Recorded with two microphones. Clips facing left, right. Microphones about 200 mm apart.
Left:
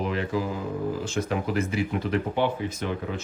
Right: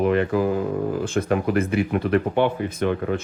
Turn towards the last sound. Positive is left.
turn(degrees=-55)  # may be behind; listen again after turning